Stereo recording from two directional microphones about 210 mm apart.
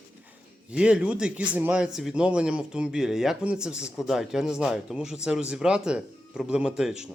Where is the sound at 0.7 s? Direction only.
5° right (ahead or behind).